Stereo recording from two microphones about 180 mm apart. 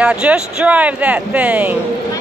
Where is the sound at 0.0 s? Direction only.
5° right (ahead or behind).